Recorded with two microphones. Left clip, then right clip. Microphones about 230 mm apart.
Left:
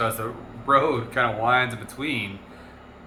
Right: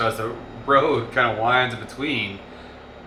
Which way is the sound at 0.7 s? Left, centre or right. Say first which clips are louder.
Right 2 dB; centre.